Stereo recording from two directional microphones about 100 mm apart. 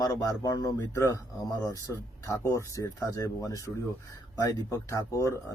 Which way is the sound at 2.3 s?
30° left (ahead or behind).